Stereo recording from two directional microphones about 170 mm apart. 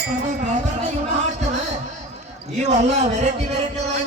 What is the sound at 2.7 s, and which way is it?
Basketball bounce, 40° right (ahead or behind).